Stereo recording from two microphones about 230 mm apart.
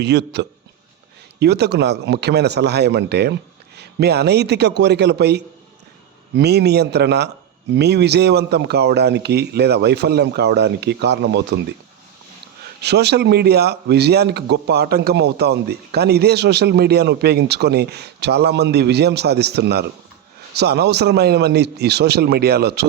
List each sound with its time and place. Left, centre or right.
0.0 s speech: right
12.8 s speech: right